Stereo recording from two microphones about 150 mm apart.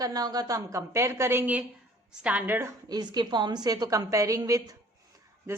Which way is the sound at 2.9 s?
30° right (ahead or behind).